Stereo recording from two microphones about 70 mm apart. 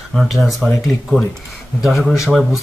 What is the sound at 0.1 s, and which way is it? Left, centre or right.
Speech, centre.